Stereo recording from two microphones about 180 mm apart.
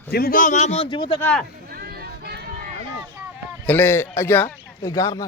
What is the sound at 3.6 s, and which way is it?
A man's voice, 10° left (ahead or behind).